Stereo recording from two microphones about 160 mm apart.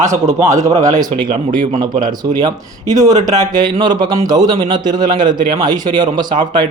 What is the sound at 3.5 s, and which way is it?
A man's voice, 30° right (ahead or behind).